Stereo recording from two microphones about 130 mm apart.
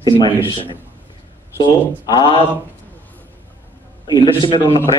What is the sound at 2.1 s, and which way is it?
Speech, 35° left (ahead or behind).